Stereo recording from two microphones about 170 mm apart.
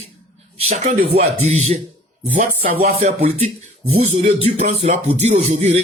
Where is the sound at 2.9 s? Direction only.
40° right (ahead or behind).